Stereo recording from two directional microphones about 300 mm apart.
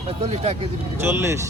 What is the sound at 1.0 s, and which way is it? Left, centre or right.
Speech, centre.